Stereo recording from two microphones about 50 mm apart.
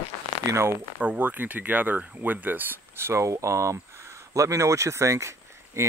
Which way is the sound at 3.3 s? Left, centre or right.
Right.